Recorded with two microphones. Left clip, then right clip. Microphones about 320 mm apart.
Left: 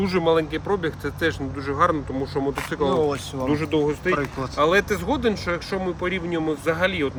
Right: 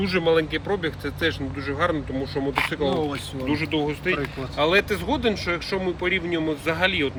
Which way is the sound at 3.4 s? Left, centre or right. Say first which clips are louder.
Left 3 dB; centre.